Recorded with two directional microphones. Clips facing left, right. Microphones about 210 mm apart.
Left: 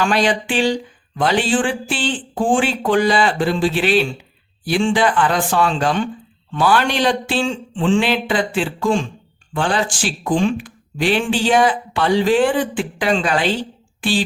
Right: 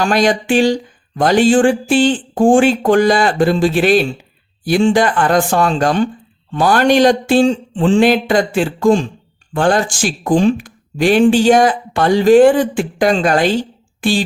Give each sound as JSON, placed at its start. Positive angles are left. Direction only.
{"t": 0.0, "sound": "speech", "side_deg": -45}